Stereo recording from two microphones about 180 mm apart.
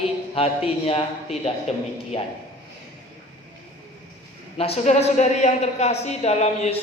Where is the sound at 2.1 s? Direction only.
35° left (ahead or behind).